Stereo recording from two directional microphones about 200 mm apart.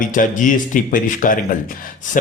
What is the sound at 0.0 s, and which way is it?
Speech, 40° left (ahead or behind).